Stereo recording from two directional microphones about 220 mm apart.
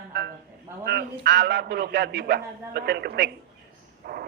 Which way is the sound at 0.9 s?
50° right (ahead or behind).